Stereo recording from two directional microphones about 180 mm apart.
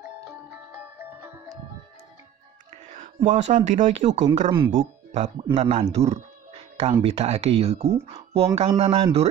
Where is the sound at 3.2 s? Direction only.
40° right (ahead or behind).